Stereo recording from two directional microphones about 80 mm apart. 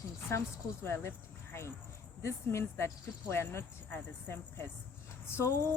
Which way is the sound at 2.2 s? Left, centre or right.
Left.